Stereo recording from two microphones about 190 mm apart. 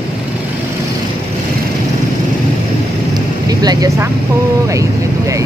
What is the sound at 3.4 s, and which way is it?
Speech, 20° right (ahead or behind).